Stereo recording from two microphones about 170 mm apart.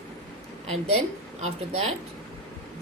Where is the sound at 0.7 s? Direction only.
40° right (ahead or behind).